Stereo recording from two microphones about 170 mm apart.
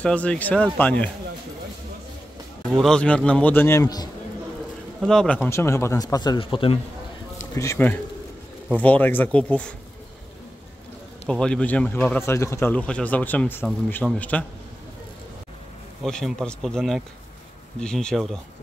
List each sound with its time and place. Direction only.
0.0 s speech: 5° left (ahead or behind)
2.7 s speech: 5° left (ahead or behind); by 4.1 s 20° left (ahead or behind)
5.0 s speech: 5° left (ahead or behind)
5.4 s speech: 15° left (ahead or behind); by 6.8 s 35° left (ahead or behind)
7.5 s speech: 15° left (ahead or behind)
11.2 s speech: 5° left (ahead or behind)
16.0 s speech: centre (ahead or behind)